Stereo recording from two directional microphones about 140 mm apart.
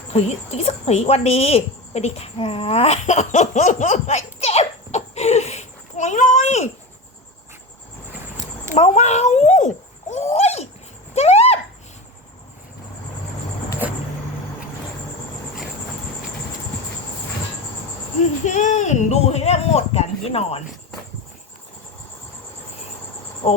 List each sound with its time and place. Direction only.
0.1 s a woman's voice: 50° left (ahead or behind)
8.7 s a sound: 55° left (ahead or behind)
18.4 s speech: 65° left (ahead or behind); by 20.6 s 45° left (ahead or behind)